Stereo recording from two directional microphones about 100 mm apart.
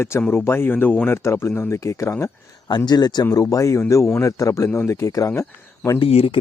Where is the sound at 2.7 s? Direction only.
50° left (ahead or behind).